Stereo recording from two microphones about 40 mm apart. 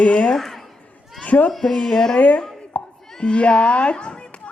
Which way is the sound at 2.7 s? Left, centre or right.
Left.